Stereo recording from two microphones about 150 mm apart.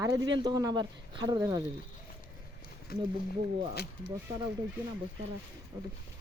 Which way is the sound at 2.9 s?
90° left.